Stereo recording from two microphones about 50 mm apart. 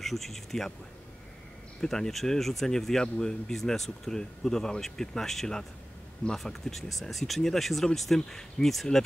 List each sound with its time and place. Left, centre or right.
0.0 s speech: centre
1.8 s speech: centre